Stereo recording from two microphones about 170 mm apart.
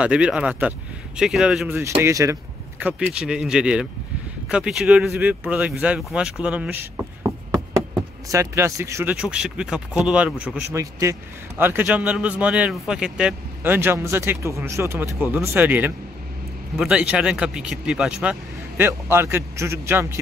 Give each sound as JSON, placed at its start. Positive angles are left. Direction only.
{"t": 0.0, "sound": "speech", "side_deg": -5}
{"t": 2.0, "sound": "speech", "side_deg": -15}
{"t": 9.1, "sound": "speech", "side_deg": -5}